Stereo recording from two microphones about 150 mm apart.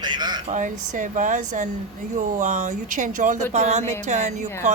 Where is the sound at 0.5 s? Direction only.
60° right (ahead or behind).